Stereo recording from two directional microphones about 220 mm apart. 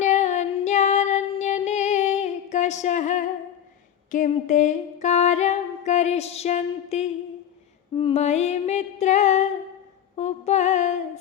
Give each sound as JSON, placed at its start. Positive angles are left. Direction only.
{"t": 0.0, "sound": "female singing", "side_deg": 30}
{"t": 4.1, "sound": "music", "side_deg": 35}
{"t": 7.9, "sound": "a sound", "side_deg": 30}
{"t": 10.2, "sound": "music", "side_deg": 30}